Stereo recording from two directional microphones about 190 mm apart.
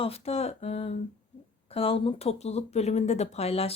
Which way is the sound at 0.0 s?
30° left (ahead or behind).